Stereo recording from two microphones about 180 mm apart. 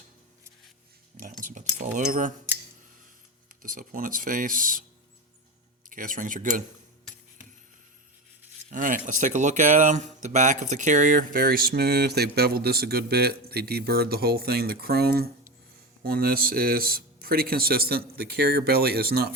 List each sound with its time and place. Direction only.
1.1 s speech: 45° right (ahead or behind)
3.6 s speech: 50° right (ahead or behind)
5.9 s speech: 50° right (ahead or behind)
8.7 s speech: 45° right (ahead or behind)